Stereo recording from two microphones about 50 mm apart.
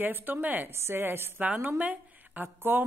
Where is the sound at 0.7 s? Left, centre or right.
Right.